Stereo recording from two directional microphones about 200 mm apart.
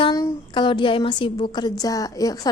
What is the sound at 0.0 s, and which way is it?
A woman's voice, 20° left (ahead or behind).